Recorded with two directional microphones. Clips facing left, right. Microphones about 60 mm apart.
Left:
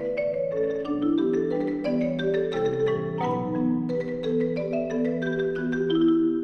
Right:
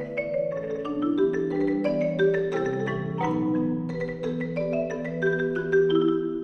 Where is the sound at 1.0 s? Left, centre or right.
Centre.